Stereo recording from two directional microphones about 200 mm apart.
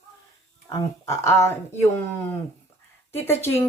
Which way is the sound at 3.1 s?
10° left (ahead or behind).